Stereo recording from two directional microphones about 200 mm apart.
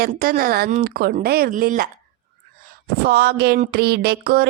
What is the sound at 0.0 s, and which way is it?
Speech, 45° right (ahead or behind).